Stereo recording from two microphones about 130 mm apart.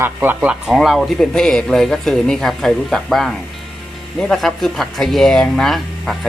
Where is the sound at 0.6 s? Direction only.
Centre (ahead or behind).